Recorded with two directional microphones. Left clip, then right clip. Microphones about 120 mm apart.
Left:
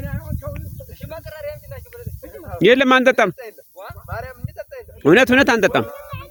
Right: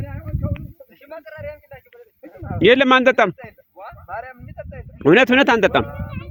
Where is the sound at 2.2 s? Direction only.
30° left (ahead or behind).